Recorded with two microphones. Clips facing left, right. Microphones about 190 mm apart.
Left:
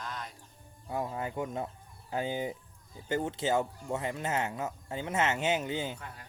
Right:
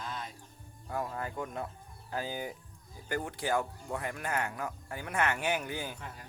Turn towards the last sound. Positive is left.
turn(degrees=20)  # may be behind; listen again after turning